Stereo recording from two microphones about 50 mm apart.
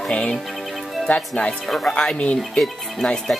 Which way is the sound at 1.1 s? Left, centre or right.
Left.